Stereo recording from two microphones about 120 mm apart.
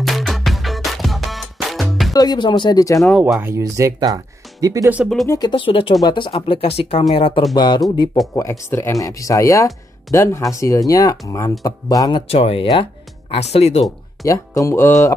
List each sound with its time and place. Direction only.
0.0 s music: centre (ahead or behind)
2.1 s speech: 35° left (ahead or behind)
3.0 s speech: centre (ahead or behind)
3.3 s speech: 20° right (ahead or behind)
4.8 s speech: 10° right (ahead or behind)
5.2 s speech: 25° left (ahead or behind)
5.5 s speech: 45° left (ahead or behind)
7.5 s speech: 35° left (ahead or behind)
8.4 s speech: 25° left (ahead or behind)
12.3 s speech: 55° left (ahead or behind)
14.2 s speech: 25° left (ahead or behind)